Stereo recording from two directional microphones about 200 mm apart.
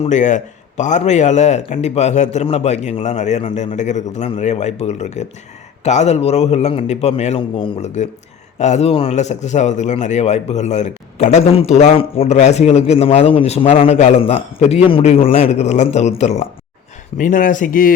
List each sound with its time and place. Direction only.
0.0 s a man's voice: 35° left (ahead or behind)